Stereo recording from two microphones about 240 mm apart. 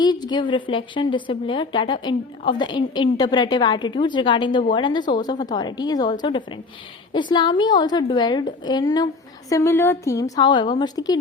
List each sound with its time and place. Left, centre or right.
0.0 s a woman's voice: centre